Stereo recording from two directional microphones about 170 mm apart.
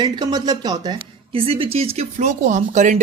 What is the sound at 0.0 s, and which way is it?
A woman's voice, 25° right (ahead or behind).